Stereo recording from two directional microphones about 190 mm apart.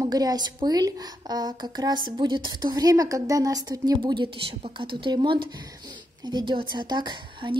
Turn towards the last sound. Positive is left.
turn(degrees=-25)  # may be behind; listen again after turning